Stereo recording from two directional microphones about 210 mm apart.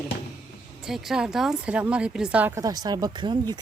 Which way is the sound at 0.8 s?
Centre (ahead or behind).